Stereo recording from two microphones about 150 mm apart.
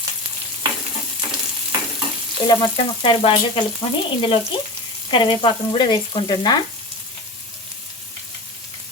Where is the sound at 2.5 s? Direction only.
30° left (ahead or behind).